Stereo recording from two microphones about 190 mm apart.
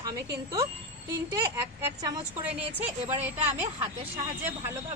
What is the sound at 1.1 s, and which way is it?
Speech, 15° right (ahead or behind).